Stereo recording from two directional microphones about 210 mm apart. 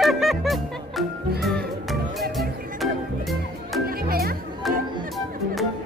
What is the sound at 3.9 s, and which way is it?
Music, 45° right (ahead or behind).